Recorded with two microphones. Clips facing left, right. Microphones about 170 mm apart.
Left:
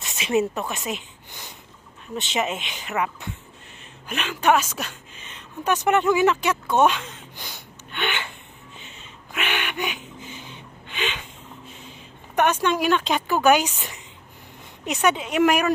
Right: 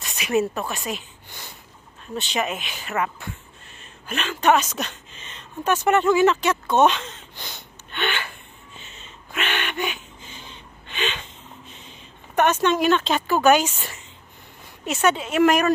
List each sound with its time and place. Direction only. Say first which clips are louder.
0.0 s speech: even; 20° left (ahead or behind)
4.1 s a sound: right 1 dB; 10° left (ahead or behind)
12.4 s speech: right 2 dB; 10° left (ahead or behind)